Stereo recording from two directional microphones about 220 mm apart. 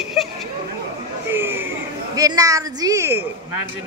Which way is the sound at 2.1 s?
15° right (ahead or behind).